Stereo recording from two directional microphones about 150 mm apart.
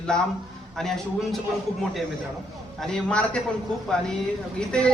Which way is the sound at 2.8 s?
5° left (ahead or behind).